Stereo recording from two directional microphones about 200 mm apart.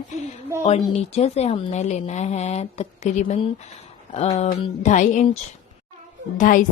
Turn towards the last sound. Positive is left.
turn(degrees=40)  # may be behind; listen again after turning